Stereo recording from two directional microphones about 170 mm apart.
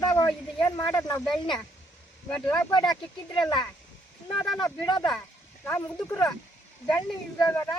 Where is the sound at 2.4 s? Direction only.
10° left (ahead or behind).